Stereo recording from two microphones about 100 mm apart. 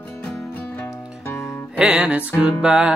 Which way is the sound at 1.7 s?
10° right (ahead or behind).